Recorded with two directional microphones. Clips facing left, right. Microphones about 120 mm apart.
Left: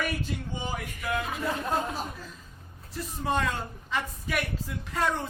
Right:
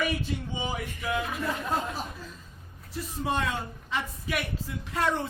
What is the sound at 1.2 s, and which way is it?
Speech, 20° left (ahead or behind).